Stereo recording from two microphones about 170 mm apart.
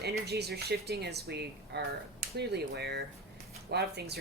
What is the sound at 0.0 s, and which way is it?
Speech, 70° right (ahead or behind).